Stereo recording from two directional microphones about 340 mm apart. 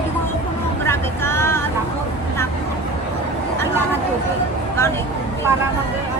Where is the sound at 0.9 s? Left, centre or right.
Centre.